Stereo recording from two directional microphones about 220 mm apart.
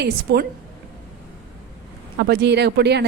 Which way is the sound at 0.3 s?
50° right (ahead or behind).